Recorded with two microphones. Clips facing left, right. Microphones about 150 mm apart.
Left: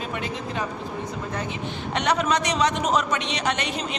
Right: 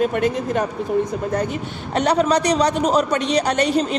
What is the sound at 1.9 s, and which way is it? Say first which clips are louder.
A man's voice: right 6 dB; 35° right (ahead or behind).